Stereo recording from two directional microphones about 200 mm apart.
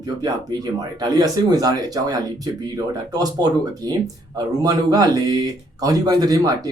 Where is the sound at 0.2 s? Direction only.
20° right (ahead or behind).